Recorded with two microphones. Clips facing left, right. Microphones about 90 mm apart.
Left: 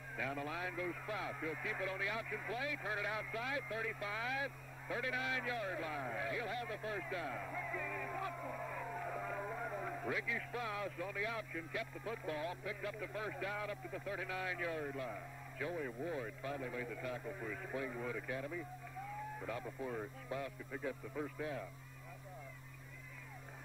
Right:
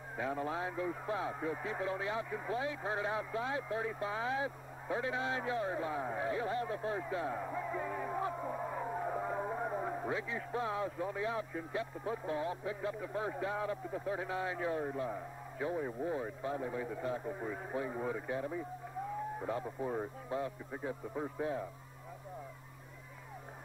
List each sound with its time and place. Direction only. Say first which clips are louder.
0.2 s a man's voice: right 5 dB; 30° right (ahead or behind)